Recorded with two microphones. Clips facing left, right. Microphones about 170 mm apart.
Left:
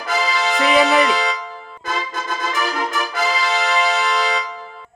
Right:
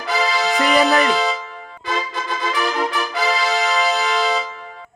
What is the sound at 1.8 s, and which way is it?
Music, 45° left (ahead or behind).